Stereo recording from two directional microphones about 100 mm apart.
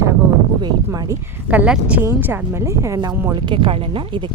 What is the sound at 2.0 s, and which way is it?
Speech, 20° right (ahead or behind).